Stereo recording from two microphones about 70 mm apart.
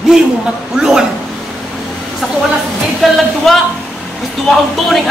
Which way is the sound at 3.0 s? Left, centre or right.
Centre.